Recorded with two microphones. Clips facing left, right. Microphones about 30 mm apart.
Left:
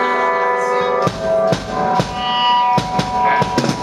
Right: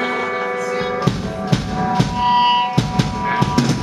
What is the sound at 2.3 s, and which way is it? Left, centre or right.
Music, left.